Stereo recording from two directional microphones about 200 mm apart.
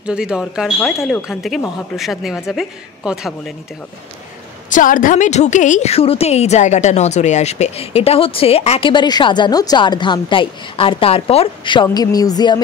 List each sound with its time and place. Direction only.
0.0 s speech: 5° right (ahead or behind)
4.6 s a woman's voice: 40° left (ahead or behind); by 12.6 s 20° left (ahead or behind)